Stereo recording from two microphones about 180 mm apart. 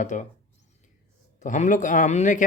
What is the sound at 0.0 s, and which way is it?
Speech, 45° left (ahead or behind).